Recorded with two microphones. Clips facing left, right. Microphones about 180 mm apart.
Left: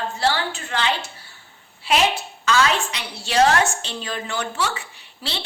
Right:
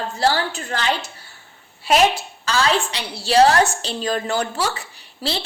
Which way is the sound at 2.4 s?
35° right (ahead or behind).